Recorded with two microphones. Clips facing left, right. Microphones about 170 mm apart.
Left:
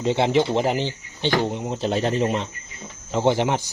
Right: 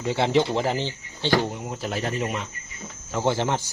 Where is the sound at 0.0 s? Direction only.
20° left (ahead or behind).